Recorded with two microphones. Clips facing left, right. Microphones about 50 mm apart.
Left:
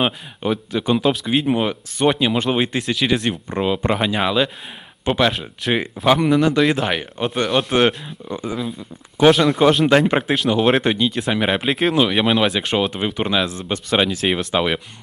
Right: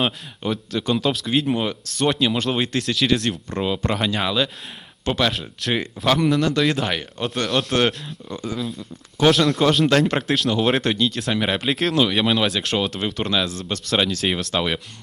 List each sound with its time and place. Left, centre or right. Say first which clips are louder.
0.0 s speech: left 3 dB; centre
6.4 s speech: left 3 dB; centre